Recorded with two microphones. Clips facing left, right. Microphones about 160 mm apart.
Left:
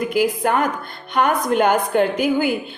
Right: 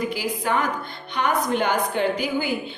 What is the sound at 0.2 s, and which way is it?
A woman's voice, 50° left (ahead or behind).